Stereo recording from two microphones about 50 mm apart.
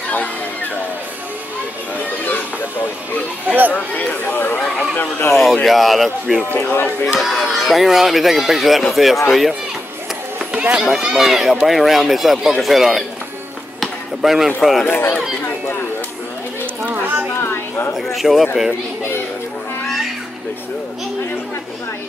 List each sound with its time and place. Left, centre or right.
2.0 s a sound: left
3.4 s speech: right
3.7 s speech: left
5.3 s speech: centre
6.5 s speech: left
7.2 s speech: centre
10.5 s run: right
10.8 s speech: centre
13.7 s music: centre
14.6 s speech: centre
16.9 s a sound: right
17.4 s a sound: left
18.0 s speech: centre